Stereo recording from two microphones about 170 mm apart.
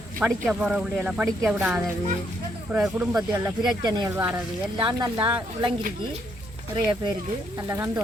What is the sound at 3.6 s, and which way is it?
Speech, 25° right (ahead or behind).